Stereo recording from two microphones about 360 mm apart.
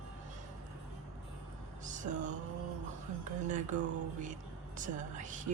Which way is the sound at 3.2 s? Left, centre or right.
Right.